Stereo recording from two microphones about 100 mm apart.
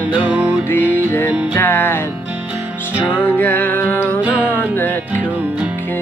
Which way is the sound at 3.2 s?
20° left (ahead or behind).